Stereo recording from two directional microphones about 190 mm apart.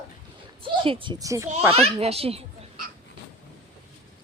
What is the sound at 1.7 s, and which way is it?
Speech, 35° right (ahead or behind).